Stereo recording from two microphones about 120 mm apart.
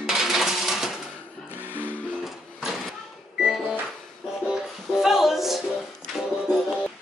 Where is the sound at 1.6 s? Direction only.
15° right (ahead or behind).